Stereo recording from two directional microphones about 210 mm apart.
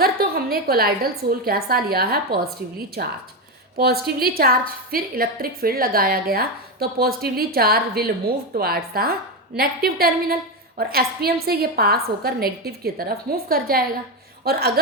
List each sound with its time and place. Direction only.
0.0 s a woman's voice: 45° right (ahead or behind)